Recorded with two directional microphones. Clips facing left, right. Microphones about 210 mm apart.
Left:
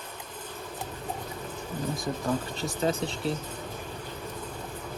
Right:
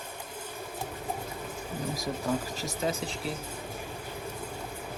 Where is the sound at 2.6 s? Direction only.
35° left (ahead or behind).